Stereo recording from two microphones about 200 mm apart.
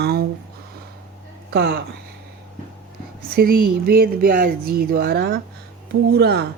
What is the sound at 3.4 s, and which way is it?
Speech, 50° right (ahead or behind).